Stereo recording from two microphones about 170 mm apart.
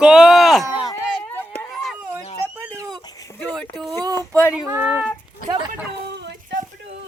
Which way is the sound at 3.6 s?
Centre (ahead or behind).